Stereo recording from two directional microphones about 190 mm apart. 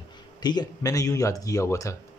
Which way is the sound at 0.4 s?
20° left (ahead or behind).